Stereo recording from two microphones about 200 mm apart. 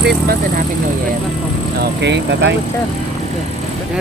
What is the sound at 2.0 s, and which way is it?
Speech, 60° right (ahead or behind).